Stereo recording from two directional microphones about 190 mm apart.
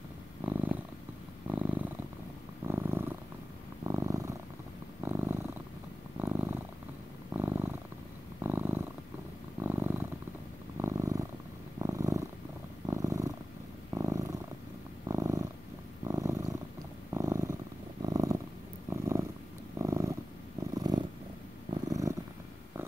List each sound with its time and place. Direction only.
0.4 s purr: 10° right (ahead or behind)